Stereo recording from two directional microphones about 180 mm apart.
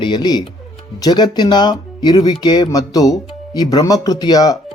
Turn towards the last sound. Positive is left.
turn(degrees=20)  # may be behind; listen again after turning